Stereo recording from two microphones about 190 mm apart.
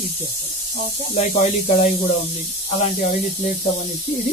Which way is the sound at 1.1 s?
35° left (ahead or behind).